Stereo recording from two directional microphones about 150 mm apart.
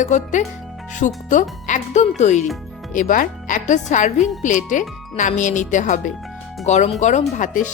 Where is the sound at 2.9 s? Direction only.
65° left (ahead or behind).